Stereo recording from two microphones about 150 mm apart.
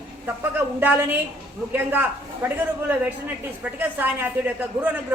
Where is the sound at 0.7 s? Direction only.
10° right (ahead or behind).